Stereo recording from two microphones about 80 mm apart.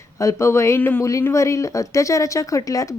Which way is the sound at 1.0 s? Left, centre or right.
Left.